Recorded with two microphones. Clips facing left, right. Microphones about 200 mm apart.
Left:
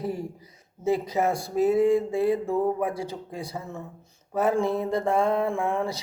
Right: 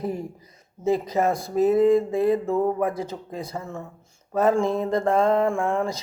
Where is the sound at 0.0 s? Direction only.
15° right (ahead or behind).